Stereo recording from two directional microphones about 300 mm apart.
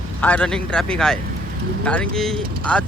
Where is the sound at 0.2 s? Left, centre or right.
Centre.